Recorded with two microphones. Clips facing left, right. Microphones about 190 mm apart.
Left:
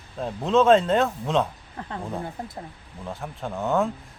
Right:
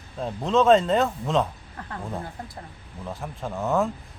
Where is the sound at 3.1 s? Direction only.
Centre (ahead or behind).